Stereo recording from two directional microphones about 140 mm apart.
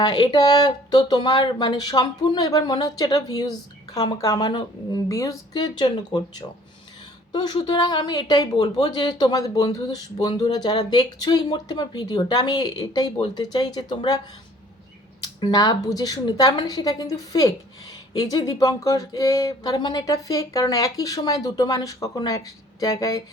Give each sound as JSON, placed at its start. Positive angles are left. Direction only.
{"t": 0.0, "sound": "a woman's voice", "side_deg": 30}
{"t": 15.2, "sound": "a woman's voice", "side_deg": 30}